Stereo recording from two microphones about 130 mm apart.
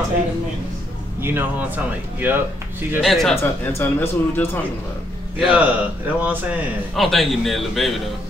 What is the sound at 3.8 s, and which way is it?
Speech, 15° left (ahead or behind).